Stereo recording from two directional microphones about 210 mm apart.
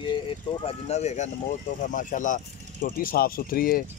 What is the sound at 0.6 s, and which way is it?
Speech, 30° left (ahead or behind).